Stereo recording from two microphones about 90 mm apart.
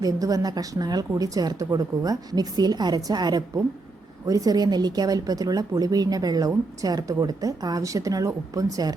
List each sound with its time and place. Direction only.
0.0 s speech: 40° right (ahead or behind)